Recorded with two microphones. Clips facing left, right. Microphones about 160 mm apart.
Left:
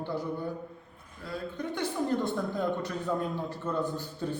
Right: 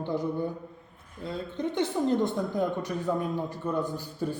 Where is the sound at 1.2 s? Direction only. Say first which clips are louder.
Right 3 dB; 20° right (ahead or behind).